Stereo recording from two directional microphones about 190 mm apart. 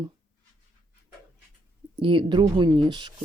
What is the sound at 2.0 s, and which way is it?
Speech, 25° right (ahead or behind).